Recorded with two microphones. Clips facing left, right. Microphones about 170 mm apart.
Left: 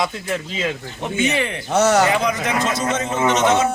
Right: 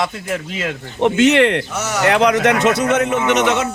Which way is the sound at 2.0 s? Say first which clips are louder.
Right 5 dB; 75° right (ahead or behind).